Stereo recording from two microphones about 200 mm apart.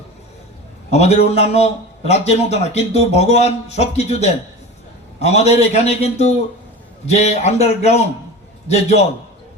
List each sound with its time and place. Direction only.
0.9 s a man's voice: 35° left (ahead or behind)